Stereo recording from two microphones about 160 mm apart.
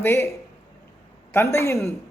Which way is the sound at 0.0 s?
15° left (ahead or behind).